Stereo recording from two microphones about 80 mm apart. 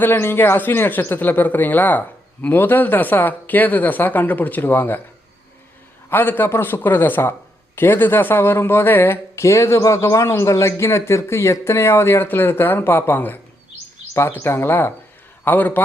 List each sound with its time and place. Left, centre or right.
0.0 s speech: left
6.1 s speech: left
14.1 s speech: left